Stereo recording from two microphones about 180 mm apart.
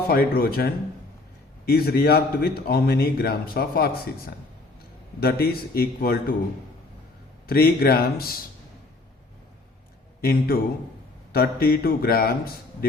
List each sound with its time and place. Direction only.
0.1 s a man's voice: 55° left (ahead or behind)
5.2 s a man's voice: 55° left (ahead or behind)
7.4 s a man's voice: 55° left (ahead or behind)
10.2 s a man's voice: 55° left (ahead or behind)